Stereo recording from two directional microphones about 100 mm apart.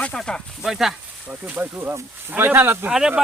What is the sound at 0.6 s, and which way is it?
Speech, 5° right (ahead or behind).